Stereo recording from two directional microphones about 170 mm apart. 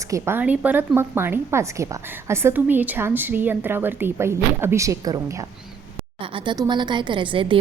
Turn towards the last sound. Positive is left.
turn(degrees=-30)  # may be behind; listen again after turning